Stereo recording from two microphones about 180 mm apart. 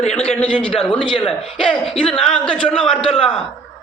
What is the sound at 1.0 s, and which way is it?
Speech, 25° left (ahead or behind).